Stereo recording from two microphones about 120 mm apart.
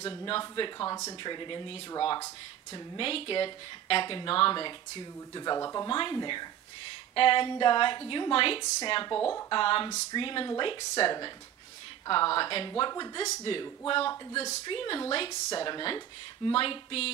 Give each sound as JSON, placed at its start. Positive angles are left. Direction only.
{"t": 0.0, "sound": "a woman's voice", "side_deg": 40}
{"t": 0.7, "sound": "speech", "side_deg": 25}
{"t": 1.2, "sound": "a woman's voice", "side_deg": 40}
{"t": 3.0, "sound": "speech", "side_deg": 50}
{"t": 5.9, "sound": "a woman's voice", "side_deg": 45}